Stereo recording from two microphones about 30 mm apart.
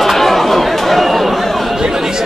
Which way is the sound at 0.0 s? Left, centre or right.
Centre.